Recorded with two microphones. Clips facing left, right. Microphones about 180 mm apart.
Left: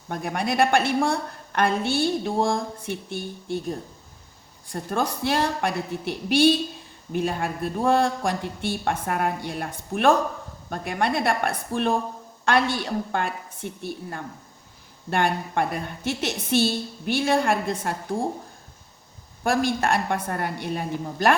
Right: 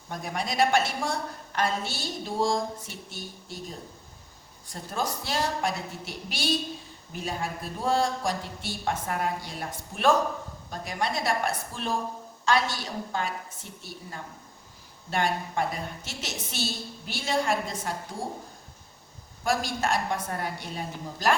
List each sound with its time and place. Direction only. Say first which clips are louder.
0.1 s a woman's voice: left 6 dB; 60° left (ahead or behind)
19.4 s a woman's voice: left 5 dB; 60° left (ahead or behind)